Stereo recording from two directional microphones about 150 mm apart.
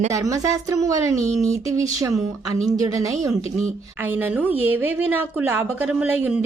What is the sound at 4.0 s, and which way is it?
A woman's voice, 10° right (ahead or behind).